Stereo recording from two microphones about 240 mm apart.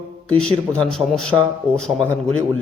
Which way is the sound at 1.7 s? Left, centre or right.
Centre.